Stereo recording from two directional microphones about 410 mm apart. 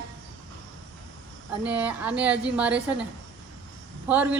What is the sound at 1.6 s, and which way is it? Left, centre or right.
A woman's voice, centre.